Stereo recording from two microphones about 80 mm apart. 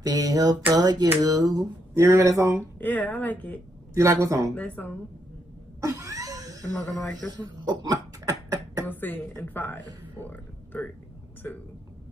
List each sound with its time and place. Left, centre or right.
0.0 s a sound: right
2.0 s speech: right
2.8 s a woman's voice: left
3.9 s speech: right
4.6 s a woman's voice: centre
5.8 s cough: right
7.0 s a man's voice: centre
7.3 s cough: right
8.8 s a woman's voice: left